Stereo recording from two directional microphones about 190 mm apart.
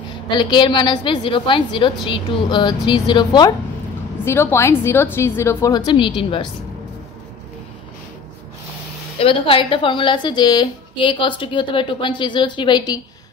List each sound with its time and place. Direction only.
0.4 s a woman's voice: 25° left (ahead or behind)
9.2 s a woman's voice: 30° left (ahead or behind)